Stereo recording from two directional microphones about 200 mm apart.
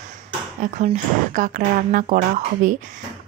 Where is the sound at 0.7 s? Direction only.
40° right (ahead or behind).